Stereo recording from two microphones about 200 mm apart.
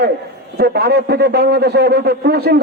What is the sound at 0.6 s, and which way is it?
A man's voice, 55° right (ahead or behind).